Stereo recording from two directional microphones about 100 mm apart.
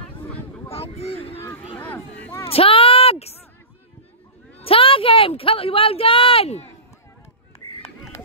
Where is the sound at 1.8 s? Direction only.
15° left (ahead or behind).